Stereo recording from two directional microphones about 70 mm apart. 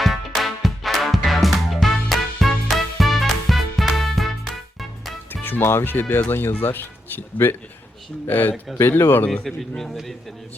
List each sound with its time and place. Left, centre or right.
0.0 s music: centre
5.3 s speech: left
9.3 s a man's voice: centre